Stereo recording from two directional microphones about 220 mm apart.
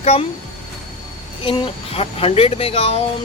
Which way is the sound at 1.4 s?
25° left (ahead or behind).